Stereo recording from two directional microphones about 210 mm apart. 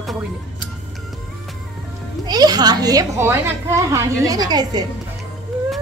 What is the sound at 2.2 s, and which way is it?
A child's voice, 20° right (ahead or behind).